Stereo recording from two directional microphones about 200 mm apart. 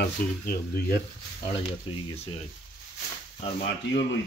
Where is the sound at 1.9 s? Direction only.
30° left (ahead or behind).